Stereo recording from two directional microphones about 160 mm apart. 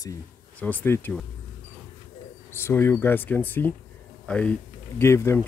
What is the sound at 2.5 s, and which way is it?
Speech, 15° left (ahead or behind).